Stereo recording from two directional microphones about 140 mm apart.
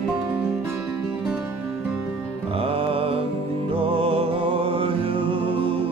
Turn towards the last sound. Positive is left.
turn(degrees=-40)  # may be behind; listen again after turning